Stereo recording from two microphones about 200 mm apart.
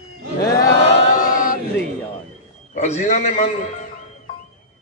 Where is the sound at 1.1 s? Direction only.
45° left (ahead or behind).